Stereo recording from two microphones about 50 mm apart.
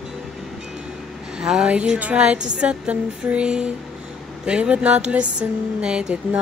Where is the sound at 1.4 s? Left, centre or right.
Centre.